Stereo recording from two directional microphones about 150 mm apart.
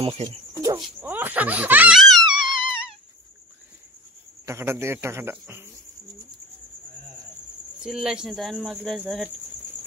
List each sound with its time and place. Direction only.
0.0 s speech: 40° right (ahead or behind)
0.6 s a sound: 20° right (ahead or behind)
1.0 s speech: 10° right (ahead or behind)
2.0 s wail: centre (ahead or behind)
2.2 s wail: 30° right (ahead or behind)
4.5 s speech: 15° right (ahead or behind)
7.8 s speech: 5° right (ahead or behind)